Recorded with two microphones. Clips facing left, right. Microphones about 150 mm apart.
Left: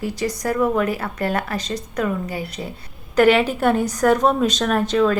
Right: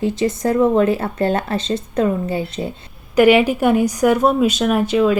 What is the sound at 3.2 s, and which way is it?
A woman's voice, 10° right (ahead or behind).